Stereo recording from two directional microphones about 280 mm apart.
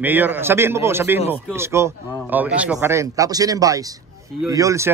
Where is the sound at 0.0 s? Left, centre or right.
Centre.